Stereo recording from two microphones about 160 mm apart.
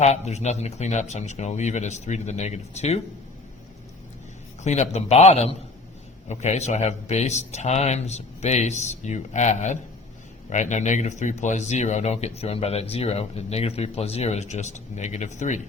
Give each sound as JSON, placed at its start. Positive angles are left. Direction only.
{"t": 0.0, "sound": "speech", "side_deg": 45}
{"t": 4.6, "sound": "a man's voice", "side_deg": 45}